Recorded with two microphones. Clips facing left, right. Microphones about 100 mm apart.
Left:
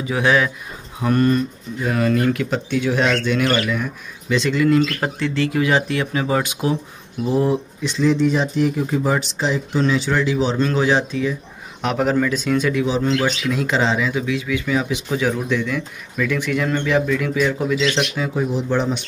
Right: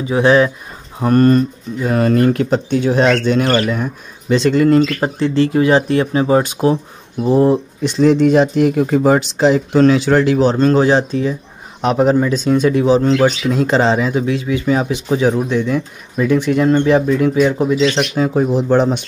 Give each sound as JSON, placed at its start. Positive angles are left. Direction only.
{"t": 0.0, "sound": "speech", "side_deg": -30}
{"t": 5.0, "sound": "speech", "side_deg": -30}
{"t": 7.8, "sound": "speech", "side_deg": -60}
{"t": 11.8, "sound": "speech", "side_deg": -25}
{"t": 18.1, "sound": "speech", "side_deg": -45}